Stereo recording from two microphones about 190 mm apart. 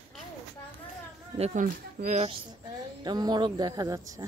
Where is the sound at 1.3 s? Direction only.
35° right (ahead or behind).